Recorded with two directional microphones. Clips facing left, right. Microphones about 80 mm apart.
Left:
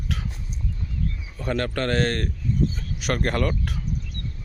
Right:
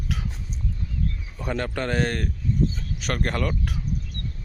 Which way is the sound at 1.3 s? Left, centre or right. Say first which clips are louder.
Left 2 dB; centre.